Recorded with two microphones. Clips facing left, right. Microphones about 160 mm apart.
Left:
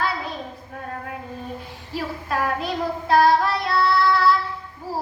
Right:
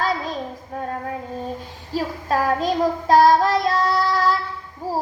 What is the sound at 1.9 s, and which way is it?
Child singing, 35° right (ahead or behind).